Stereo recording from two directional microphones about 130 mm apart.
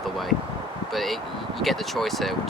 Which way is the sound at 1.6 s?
Centre (ahead or behind).